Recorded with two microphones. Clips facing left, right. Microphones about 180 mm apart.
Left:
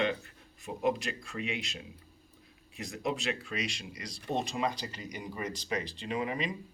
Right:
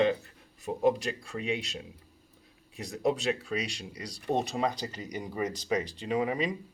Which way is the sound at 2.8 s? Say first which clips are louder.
Right 5 dB; 35° right (ahead or behind).